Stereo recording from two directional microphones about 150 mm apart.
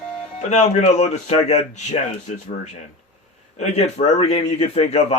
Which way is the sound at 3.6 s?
50° left (ahead or behind).